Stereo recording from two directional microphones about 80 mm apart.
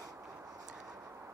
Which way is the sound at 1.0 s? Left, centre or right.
Right.